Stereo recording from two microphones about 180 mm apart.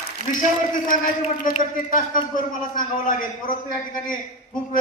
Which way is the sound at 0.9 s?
45° left (ahead or behind).